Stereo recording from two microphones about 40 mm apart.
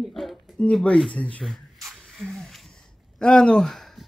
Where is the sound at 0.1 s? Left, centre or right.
Centre.